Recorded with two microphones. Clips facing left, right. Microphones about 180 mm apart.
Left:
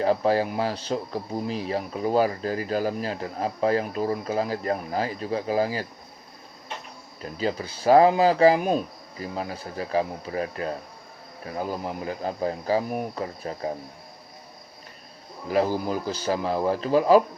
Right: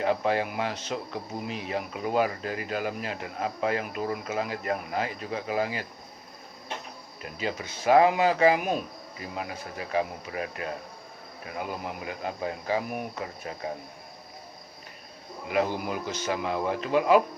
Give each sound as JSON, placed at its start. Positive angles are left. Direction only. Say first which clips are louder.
{"t": 0.0, "sound": "speech", "louder": "left 4 dB", "side_deg": 35}
{"t": 7.2, "sound": "speech", "louder": "left 5 dB", "side_deg": 35}
{"t": 15.4, "sound": "speech", "louder": "left 4 dB", "side_deg": 35}